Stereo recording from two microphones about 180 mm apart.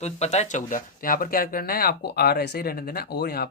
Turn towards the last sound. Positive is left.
turn(degrees=60)  # may be behind; listen again after turning